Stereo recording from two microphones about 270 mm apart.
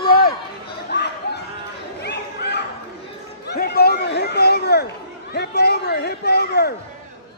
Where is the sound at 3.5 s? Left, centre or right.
Left.